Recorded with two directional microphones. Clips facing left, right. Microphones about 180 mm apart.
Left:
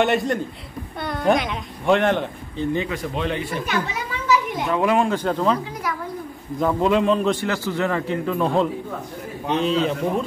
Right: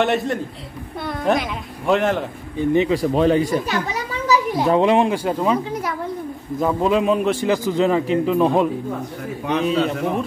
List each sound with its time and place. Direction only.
0.0 s speech: centre (ahead or behind)
2.6 s a man's voice: 20° right (ahead or behind)
2.9 s speech: 35° right (ahead or behind)
4.3 s a sound: 35° right (ahead or behind)
4.8 s speech: 20° right (ahead or behind)
5.1 s a man's voice: 10° right (ahead or behind)
6.6 s a man's voice: 5° right (ahead or behind)
9.6 s a man's voice: 5° right (ahead or behind)